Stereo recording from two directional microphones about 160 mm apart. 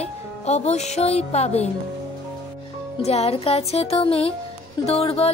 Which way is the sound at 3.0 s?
40° left (ahead or behind).